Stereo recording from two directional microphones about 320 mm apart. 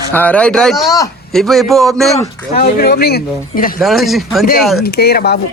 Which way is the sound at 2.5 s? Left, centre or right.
Left.